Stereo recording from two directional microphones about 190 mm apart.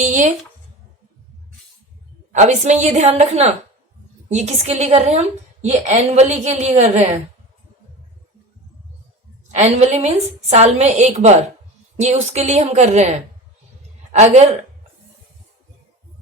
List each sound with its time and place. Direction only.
0.0 s speech: 40° right (ahead or behind)
2.3 s a woman's voice: 40° right (ahead or behind)
9.5 s a woman's voice: 35° right (ahead or behind)